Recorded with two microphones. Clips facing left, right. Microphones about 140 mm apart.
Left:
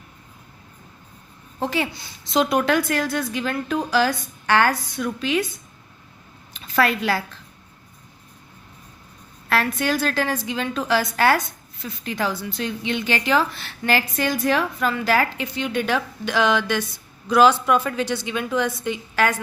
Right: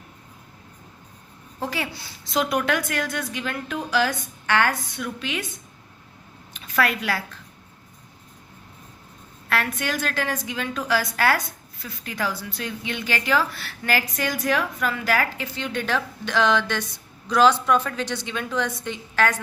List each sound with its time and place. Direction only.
1.5 s a woman's voice: 25° left (ahead or behind)
6.5 s speech: 30° left (ahead or behind)
9.5 s a woman's voice: 35° left (ahead or behind); by 19.4 s 10° left (ahead or behind)